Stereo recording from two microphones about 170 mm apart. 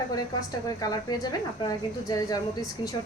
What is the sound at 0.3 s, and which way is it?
A woman's voice, 20° left (ahead or behind).